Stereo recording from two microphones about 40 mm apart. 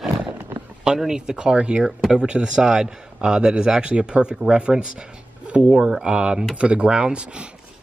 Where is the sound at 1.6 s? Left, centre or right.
Right.